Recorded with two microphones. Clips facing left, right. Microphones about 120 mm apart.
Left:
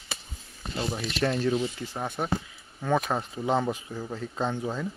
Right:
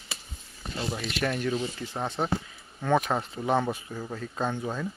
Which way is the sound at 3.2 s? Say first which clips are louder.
Even; 15° right (ahead or behind).